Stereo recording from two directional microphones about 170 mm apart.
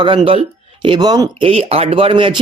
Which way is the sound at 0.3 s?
30° right (ahead or behind).